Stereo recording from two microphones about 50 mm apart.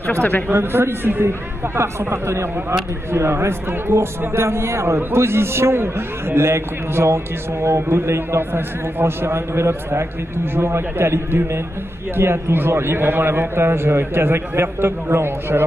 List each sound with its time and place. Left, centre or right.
0.0 s a man's voice: left
0.5 s a man's voice: right
1.8 s a man's voice: right